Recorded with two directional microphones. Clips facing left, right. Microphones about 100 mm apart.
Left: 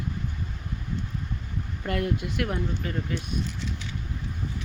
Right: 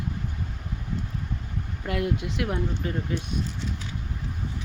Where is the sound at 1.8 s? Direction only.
10° right (ahead or behind).